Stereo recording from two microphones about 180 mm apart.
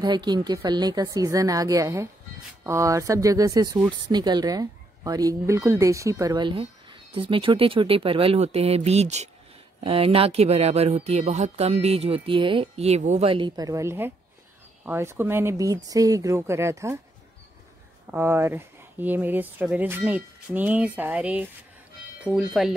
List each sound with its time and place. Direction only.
0.0 s speech: 25° right (ahead or behind)
18.1 s speech: 10° right (ahead or behind)